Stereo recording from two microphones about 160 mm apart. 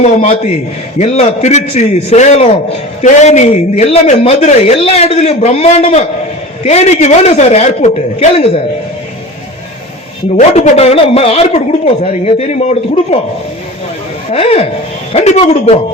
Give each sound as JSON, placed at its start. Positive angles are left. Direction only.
{"t": 0.0, "sound": "a man's voice", "side_deg": 40}
{"t": 10.3, "sound": "speech", "side_deg": 40}
{"t": 15.1, "sound": "a man's voice", "side_deg": 40}